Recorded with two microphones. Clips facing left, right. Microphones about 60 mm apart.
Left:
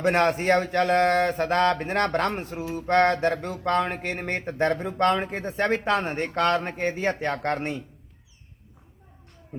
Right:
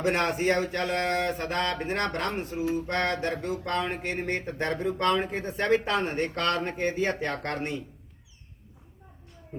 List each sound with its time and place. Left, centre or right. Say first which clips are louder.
0.1 s speech: left 5 dB; left
1.4 s speech: left 7 dB; left
3.6 s speech: left 9 dB; left
3.9 s speech: left 1 dB; left
5.6 s speech: left 1 dB; left